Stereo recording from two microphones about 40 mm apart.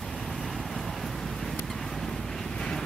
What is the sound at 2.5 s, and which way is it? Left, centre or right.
Vehicle, left.